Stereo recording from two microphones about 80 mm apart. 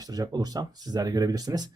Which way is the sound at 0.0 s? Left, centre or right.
Right.